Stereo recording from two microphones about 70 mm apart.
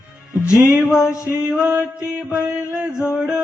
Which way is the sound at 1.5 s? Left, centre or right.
Right.